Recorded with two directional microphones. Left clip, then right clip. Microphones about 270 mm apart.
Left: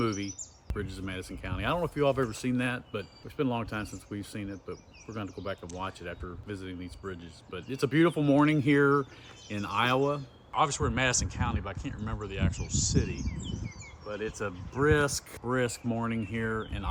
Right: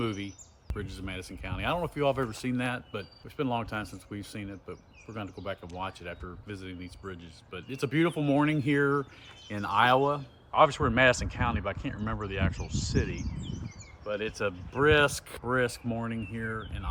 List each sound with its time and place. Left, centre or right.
0.0 s speech: centre
9.5 s speech: centre
10.5 s speech: right
15.4 s speech: centre; by 16.9 s left